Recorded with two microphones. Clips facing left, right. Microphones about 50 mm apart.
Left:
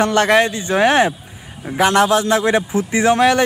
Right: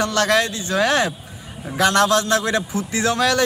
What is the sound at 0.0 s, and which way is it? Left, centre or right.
A man's voice, left.